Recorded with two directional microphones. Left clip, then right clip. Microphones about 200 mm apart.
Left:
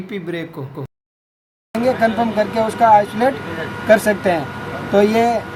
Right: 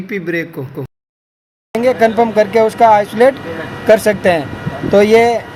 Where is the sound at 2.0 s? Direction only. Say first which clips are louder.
Right 6 dB; 40° right (ahead or behind).